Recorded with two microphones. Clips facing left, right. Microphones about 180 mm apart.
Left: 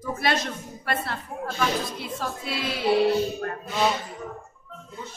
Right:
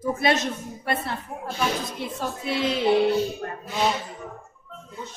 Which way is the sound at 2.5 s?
20° right (ahead or behind).